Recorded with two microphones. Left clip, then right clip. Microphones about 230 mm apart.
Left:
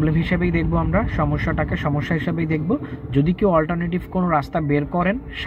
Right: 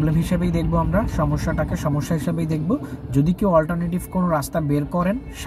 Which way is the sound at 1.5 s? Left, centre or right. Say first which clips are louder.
Left 1 dB; right.